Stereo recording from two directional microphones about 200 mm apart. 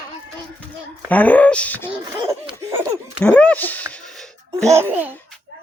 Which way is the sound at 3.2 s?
5° left (ahead or behind).